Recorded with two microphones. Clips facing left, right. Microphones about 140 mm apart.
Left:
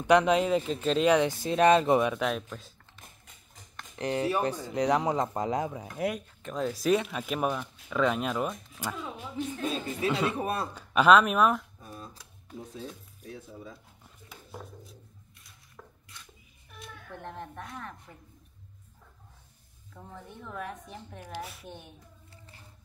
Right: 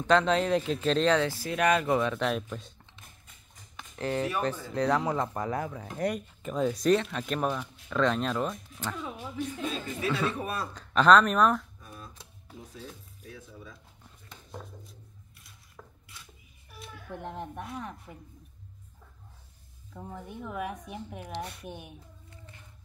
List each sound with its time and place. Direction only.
0.0 s speech: 10° left (ahead or behind)
2.1 s speech: centre (ahead or behind)
3.9 s speech: 15° left (ahead or behind)
5.9 s speech: centre (ahead or behind)
9.8 s speech: 25° left (ahead or behind)
10.7 s speech: 10° left (ahead or behind)
11.8 s a sound: 30° left (ahead or behind)
12.5 s speech: 30° left (ahead or behind)
14.0 s a sound: 5° left (ahead or behind)
17.1 s a woman's voice: 15° right (ahead or behind)
19.9 s a woman's voice: 15° right (ahead or behind)
21.4 s speech: centre (ahead or behind)
21.6 s a woman's voice: 15° right (ahead or behind)
22.3 s a sound: 30° left (ahead or behind)